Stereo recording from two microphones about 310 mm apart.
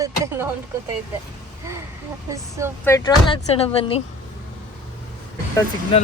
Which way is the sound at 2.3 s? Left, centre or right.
Centre.